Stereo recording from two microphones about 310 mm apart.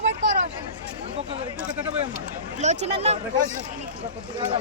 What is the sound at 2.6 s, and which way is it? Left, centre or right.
Speech, right.